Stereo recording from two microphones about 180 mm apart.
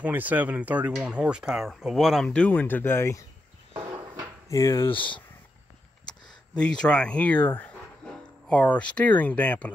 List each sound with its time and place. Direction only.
0.0 s speech: 10° right (ahead or behind); by 3.3 s 15° left (ahead or behind)
4.5 s speech: 15° left (ahead or behind)
4.9 s speech: 30° left (ahead or behind)
6.0 s speech: 5° left (ahead or behind)